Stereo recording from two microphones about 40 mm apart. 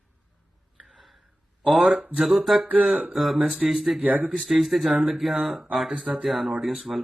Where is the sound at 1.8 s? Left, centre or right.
Right.